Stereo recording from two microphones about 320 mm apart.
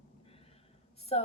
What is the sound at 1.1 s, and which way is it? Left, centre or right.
Speech, centre.